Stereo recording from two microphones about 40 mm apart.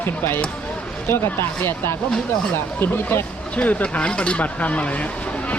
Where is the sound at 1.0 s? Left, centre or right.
Left.